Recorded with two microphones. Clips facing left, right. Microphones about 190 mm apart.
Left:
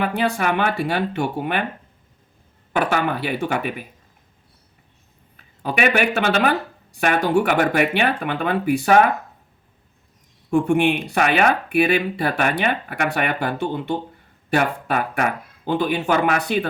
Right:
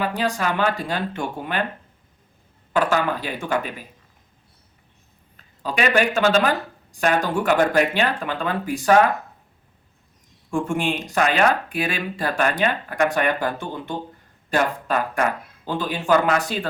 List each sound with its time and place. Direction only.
0.0 s speech: 60° left (ahead or behind)
2.7 s speech: 60° left (ahead or behind)
5.6 s speech: 60° left (ahead or behind)
10.5 s speech: 65° left (ahead or behind)